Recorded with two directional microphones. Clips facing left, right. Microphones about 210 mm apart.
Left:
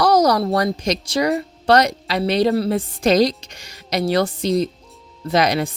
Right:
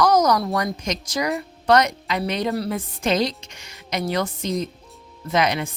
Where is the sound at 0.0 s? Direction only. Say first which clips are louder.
Left 2 dB; 35° left (ahead or behind).